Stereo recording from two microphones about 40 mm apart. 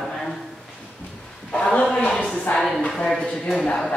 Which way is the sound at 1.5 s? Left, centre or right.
Left.